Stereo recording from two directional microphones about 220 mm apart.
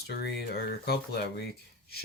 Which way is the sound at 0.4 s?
45° left (ahead or behind).